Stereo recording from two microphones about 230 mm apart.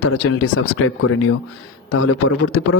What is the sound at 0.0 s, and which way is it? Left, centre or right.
A man's voice, left.